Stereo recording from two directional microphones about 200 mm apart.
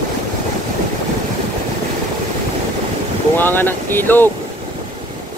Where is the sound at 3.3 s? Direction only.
10° left (ahead or behind).